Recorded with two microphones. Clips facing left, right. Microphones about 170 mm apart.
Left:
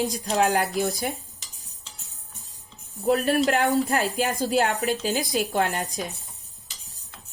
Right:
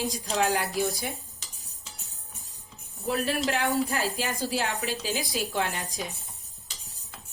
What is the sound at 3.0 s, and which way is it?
Speech, 50° left (ahead or behind).